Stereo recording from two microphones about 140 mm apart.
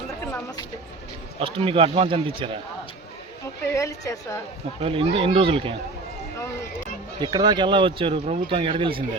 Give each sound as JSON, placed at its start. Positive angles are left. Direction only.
{"t": 1.4, "sound": "speech", "side_deg": -40}
{"t": 3.8, "sound": "a woman's voice", "side_deg": 20}
{"t": 4.8, "sound": "speech", "side_deg": -40}
{"t": 7.2, "sound": "speech", "side_deg": -30}